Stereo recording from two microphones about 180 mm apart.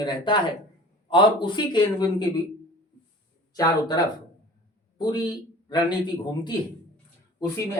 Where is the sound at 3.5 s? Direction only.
20° left (ahead or behind).